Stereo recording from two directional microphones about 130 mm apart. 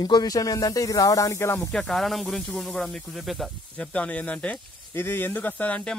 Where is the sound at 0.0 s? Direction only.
30° left (ahead or behind).